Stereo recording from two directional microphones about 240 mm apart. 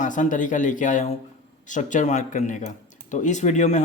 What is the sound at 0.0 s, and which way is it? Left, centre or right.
Speech, left.